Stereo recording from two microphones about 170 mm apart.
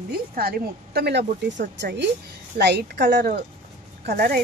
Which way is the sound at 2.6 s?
75° right (ahead or behind).